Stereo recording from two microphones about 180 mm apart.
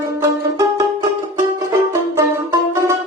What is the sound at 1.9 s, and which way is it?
Music, 15° right (ahead or behind).